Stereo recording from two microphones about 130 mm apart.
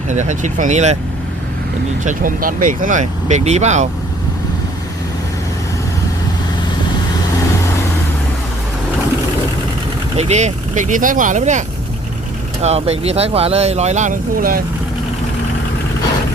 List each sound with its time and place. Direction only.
0.1 s speech: 70° right (ahead or behind)
2.0 s speech: 90° right; by 3.8 s 60° right (ahead or behind)
10.2 s speech: 60° right (ahead or behind)
12.6 s speech: 50° right (ahead or behind); by 14.6 s 90° right